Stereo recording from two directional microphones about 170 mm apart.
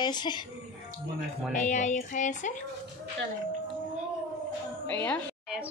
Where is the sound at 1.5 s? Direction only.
45° left (ahead or behind).